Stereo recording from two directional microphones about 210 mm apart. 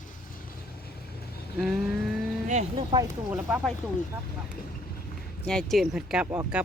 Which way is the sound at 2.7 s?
20° right (ahead or behind).